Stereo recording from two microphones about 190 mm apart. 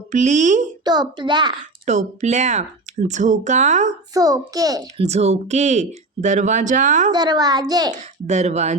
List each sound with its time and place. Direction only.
0.1 s speech: 40° right (ahead or behind)
0.9 s a child's voice: 20° right (ahead or behind)
1.9 s speech: 35° right (ahead or behind)
4.1 s a child's voice: 20° right (ahead or behind)
4.9 s speech: 35° right (ahead or behind)
7.1 s a child's voice: 20° right (ahead or behind)
7.9 s speech: 35° right (ahead or behind)